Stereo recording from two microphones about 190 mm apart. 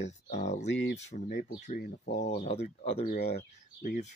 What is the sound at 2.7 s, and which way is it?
Speech, 35° left (ahead or behind).